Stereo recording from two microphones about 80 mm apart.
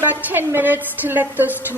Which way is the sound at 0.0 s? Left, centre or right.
Right.